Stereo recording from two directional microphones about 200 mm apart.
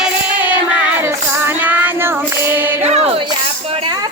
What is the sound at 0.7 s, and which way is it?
Child singing, 10° right (ahead or behind).